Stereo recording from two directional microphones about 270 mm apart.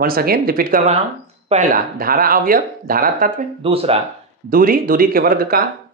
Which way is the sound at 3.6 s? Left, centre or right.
Right.